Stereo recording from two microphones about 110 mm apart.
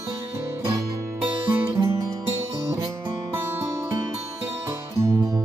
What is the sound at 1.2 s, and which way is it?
Music, 15° right (ahead or behind).